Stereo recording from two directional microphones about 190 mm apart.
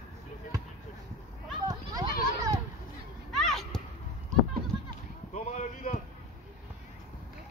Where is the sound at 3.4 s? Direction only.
Centre (ahead or behind).